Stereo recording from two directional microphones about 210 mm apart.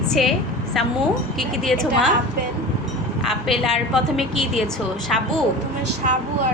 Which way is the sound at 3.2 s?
Centre (ahead or behind).